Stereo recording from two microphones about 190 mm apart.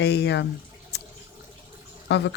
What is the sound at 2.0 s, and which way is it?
Speech, 65° left (ahead or behind).